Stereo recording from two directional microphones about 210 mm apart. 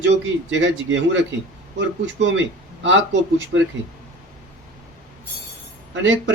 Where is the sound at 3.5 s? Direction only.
60° right (ahead or behind).